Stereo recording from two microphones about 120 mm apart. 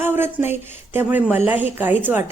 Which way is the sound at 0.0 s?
20° right (ahead or behind).